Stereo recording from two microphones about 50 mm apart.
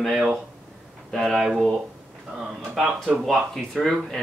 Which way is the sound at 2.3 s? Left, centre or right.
Right.